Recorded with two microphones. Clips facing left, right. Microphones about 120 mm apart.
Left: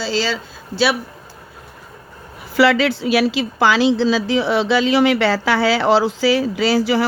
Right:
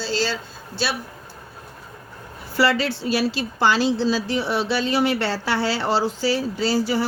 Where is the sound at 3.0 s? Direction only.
90° left.